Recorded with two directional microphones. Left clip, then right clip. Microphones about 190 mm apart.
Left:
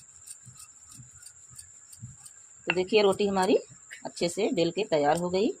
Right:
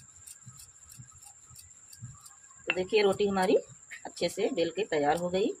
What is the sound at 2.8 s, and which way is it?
A woman's voice, 40° left (ahead or behind).